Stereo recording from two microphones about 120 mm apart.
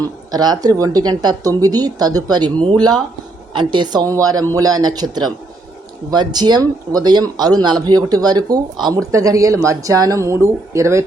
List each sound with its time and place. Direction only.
0.3 s speech: 35° right (ahead or behind)